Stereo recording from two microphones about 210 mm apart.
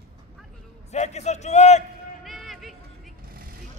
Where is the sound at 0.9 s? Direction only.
30° left (ahead or behind).